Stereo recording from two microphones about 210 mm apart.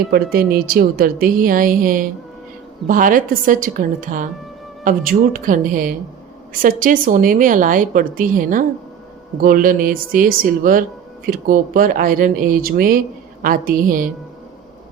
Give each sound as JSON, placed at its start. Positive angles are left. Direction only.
{"t": 0.1, "sound": "a woman's voice", "side_deg": -45}